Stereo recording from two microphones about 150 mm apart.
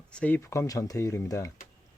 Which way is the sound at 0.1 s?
10° left (ahead or behind).